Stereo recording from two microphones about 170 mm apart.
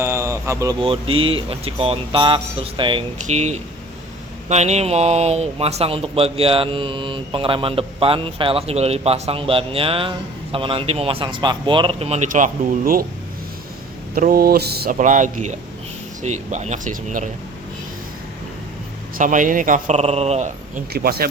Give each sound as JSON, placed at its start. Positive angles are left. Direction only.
{"t": 0.0, "sound": "a sound", "side_deg": -15}
{"t": 0.8, "sound": "speech", "side_deg": -30}
{"t": 3.2, "sound": "speech", "side_deg": -45}
{"t": 14.2, "sound": "speech", "side_deg": -60}
{"t": 14.9, "sound": "speech", "side_deg": -45}
{"t": 19.1, "sound": "speech", "side_deg": -50}
{"t": 20.9, "sound": "speech", "side_deg": -65}